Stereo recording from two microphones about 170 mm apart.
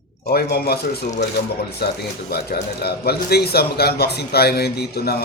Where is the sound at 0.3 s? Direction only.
65° left (ahead or behind).